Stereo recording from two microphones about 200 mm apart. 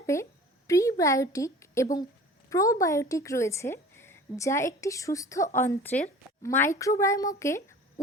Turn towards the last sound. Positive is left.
turn(degrees=15)  # may be behind; listen again after turning